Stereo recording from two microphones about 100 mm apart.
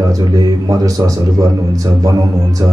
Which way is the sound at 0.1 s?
35° right (ahead or behind).